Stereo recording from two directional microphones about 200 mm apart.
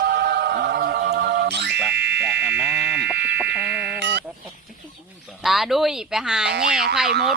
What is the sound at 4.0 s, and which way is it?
Sheep, 60° right (ahead or behind).